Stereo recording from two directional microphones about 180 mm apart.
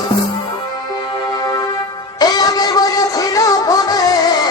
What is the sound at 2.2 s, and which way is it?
Music, 20° left (ahead or behind).